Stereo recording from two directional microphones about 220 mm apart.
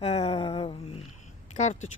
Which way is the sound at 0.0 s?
25° left (ahead or behind).